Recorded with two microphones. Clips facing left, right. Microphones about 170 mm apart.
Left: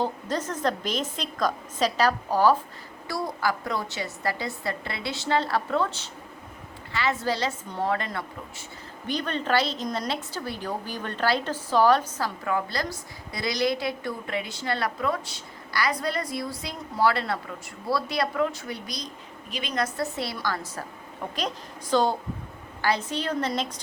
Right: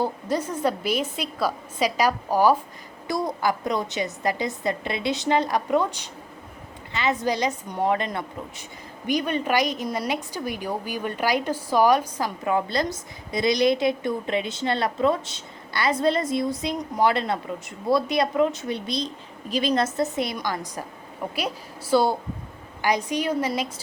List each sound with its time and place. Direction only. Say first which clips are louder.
0.0 s a woman's voice: right 3 dB; 10° right (ahead or behind)
19.5 s a woman's voice: right 7 dB; 35° right (ahead or behind); by 23.8 s 5° right (ahead or behind)